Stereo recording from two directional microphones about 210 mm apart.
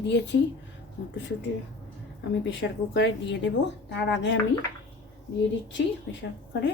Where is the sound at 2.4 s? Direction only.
60° left (ahead or behind).